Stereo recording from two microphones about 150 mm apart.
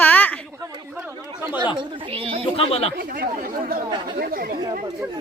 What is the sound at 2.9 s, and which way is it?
Speech, 80° right.